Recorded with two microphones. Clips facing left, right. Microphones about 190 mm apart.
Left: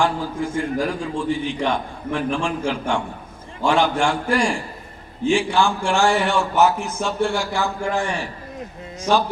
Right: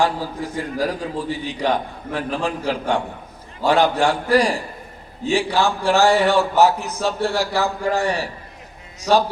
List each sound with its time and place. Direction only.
0.0 s a man's voice: 35° right (ahead or behind)